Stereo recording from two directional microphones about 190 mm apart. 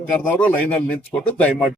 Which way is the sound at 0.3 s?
5° left (ahead or behind).